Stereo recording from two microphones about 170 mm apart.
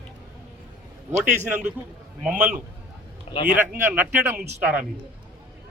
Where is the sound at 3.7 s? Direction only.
10° right (ahead or behind).